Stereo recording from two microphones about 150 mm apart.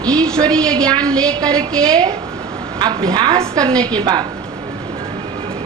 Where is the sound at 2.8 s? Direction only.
30° right (ahead or behind).